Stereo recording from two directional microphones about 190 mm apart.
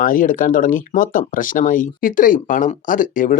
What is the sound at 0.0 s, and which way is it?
Speech, 45° left (ahead or behind).